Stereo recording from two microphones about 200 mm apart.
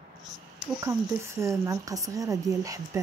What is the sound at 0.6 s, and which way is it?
Speech, 15° right (ahead or behind).